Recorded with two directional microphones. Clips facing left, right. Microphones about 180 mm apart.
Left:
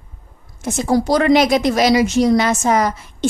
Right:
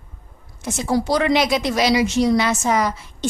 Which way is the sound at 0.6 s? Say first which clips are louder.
Left 4 dB; 45° left (ahead or behind).